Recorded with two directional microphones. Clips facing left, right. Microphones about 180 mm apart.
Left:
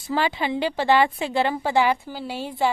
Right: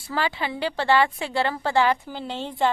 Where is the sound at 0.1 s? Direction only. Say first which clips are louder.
Left 3 dB; 20° left (ahead or behind).